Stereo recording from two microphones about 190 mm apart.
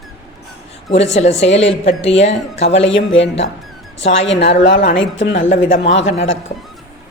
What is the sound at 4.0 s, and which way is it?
A woman's voice, 70° left (ahead or behind).